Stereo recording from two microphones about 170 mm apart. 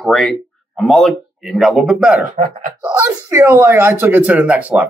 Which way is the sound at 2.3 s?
55° right (ahead or behind).